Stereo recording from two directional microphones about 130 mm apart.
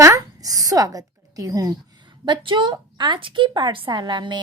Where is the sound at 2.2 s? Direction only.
35° right (ahead or behind).